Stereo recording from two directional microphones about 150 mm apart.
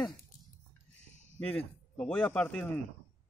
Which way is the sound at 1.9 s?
10° left (ahead or behind).